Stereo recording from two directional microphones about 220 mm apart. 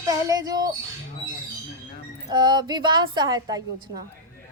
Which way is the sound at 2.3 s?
20° right (ahead or behind).